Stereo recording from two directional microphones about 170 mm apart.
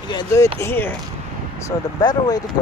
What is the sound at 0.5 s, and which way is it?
Speech, 15° left (ahead or behind).